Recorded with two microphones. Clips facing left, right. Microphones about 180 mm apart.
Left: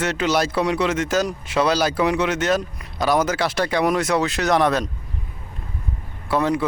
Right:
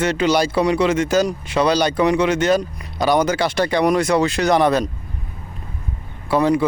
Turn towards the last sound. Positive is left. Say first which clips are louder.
# right 4 dB
turn(degrees=0)  # may be behind; listen again after turning